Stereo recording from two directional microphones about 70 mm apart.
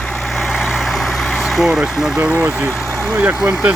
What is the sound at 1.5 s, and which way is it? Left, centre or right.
Speech, centre.